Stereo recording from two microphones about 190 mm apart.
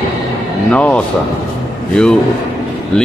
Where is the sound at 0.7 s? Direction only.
5° left (ahead or behind).